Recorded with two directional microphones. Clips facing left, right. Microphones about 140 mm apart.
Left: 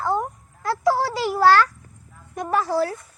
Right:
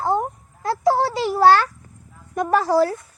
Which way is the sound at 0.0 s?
25° right (ahead or behind).